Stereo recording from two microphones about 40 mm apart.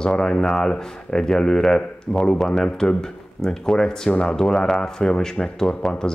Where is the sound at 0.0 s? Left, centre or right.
Centre.